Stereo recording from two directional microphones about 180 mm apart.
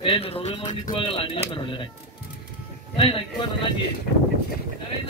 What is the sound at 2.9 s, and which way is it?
Speech, 30° left (ahead or behind).